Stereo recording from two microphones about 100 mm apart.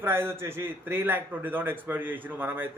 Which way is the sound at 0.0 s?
25° right (ahead or behind).